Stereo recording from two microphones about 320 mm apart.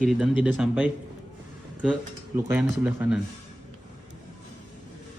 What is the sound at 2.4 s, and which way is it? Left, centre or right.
Speech, centre.